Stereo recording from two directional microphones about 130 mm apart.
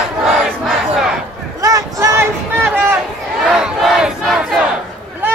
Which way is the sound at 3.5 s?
5° right (ahead or behind).